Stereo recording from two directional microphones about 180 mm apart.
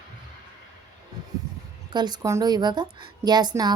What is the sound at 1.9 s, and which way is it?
A woman's voice, 25° right (ahead or behind).